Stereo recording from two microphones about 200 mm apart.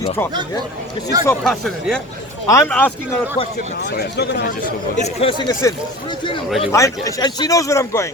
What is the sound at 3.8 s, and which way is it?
Speech, 55° left (ahead or behind).